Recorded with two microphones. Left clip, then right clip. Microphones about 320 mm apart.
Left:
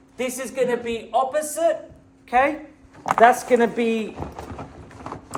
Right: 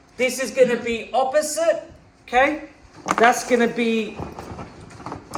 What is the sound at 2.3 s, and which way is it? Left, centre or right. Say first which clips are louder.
Speech: right 1 dB; left.